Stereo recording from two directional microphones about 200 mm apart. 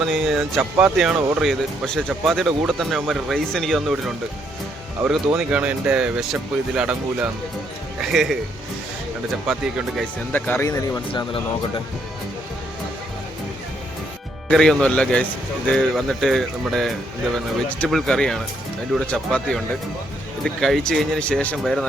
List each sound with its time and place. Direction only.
0.0 s speech: centre (ahead or behind)
9.5 s speech: centre (ahead or behind)
10.3 s speech: 10° left (ahead or behind)
14.4 s speech: 5° left (ahead or behind)